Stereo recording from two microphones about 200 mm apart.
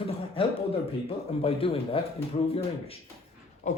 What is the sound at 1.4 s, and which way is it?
Speech, 30° left (ahead or behind).